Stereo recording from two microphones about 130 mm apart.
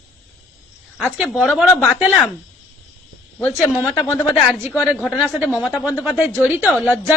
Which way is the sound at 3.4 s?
20° left (ahead or behind).